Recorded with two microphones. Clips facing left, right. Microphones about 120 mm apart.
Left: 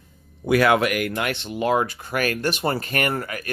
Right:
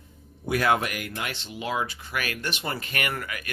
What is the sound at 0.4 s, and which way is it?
Speech, 85° left.